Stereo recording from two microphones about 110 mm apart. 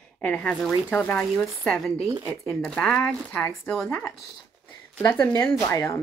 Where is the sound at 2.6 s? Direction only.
15° left (ahead or behind).